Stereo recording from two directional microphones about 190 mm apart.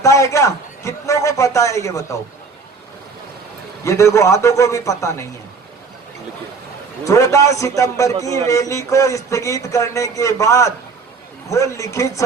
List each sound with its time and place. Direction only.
0.0 s a man's voice: 15° left (ahead or behind)
3.8 s a man's voice: 15° left (ahead or behind)
7.0 s a man's voice: 15° left (ahead or behind)